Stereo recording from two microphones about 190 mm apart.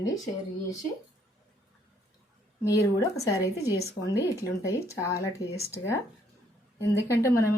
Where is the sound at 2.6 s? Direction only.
15° left (ahead or behind).